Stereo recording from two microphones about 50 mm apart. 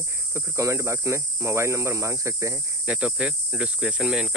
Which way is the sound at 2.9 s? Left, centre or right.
Right.